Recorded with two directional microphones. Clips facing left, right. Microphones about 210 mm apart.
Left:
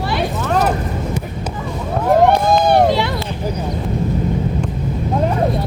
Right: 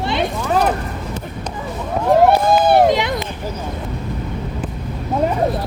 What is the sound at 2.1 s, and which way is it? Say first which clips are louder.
Run: even; 5° right (ahead or behind).